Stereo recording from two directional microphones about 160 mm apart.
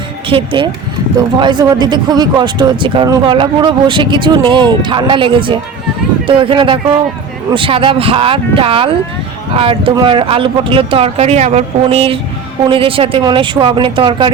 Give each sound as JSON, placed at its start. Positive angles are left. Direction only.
{"t": 0.3, "sound": "speech", "side_deg": -35}